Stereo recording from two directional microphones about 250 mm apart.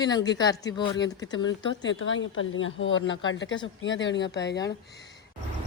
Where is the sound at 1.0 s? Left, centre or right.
Left.